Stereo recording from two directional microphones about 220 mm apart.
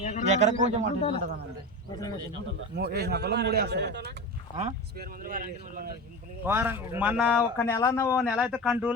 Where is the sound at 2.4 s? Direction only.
45° right (ahead or behind).